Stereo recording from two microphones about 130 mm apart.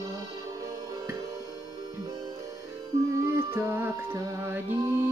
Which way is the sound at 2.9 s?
20° right (ahead or behind).